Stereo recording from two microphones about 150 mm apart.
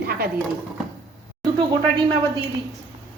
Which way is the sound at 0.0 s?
90° right.